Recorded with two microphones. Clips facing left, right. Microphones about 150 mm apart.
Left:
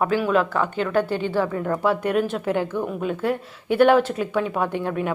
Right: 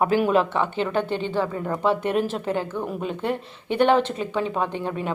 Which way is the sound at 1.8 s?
25° right (ahead or behind).